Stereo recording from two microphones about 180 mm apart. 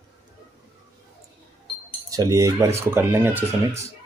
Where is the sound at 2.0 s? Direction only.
20° right (ahead or behind).